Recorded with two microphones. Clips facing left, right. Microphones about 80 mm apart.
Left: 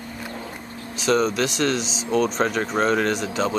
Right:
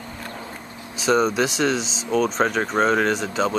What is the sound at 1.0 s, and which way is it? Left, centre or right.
Speech, centre.